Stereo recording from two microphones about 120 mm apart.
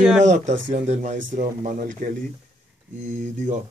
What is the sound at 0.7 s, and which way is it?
Speech, 70° right (ahead or behind).